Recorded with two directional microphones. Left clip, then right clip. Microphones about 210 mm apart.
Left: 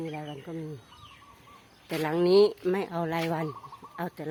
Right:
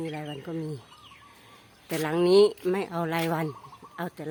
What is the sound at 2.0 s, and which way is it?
Speech, 10° right (ahead or behind).